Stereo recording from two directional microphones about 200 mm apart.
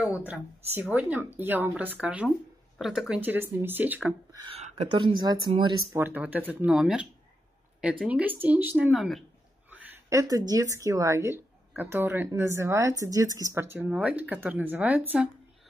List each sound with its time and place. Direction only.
0.0 s a woman's voice: 10° right (ahead or behind)
4.5 s a sound: 30° right (ahead or behind)
4.9 s speech: 20° right (ahead or behind)
5.9 s a woman's voice: 10° right (ahead or behind)